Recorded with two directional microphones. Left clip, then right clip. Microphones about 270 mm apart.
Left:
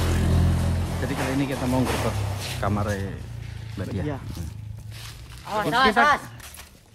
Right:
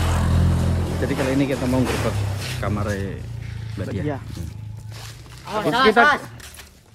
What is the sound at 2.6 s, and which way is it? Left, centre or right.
Speech, centre.